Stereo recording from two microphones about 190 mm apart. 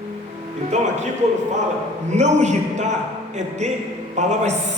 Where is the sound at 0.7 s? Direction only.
40° right (ahead or behind).